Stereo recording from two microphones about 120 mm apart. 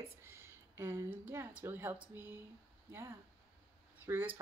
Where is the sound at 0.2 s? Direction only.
20° right (ahead or behind).